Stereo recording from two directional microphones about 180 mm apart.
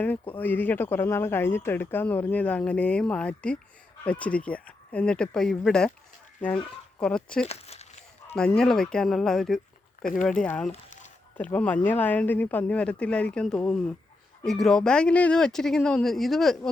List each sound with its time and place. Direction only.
0.0 s speech: 10° left (ahead or behind)
7.0 s speech: 5° left (ahead or behind)
7.4 s a sound: 35° left (ahead or behind)
8.4 s speech: 5° left (ahead or behind)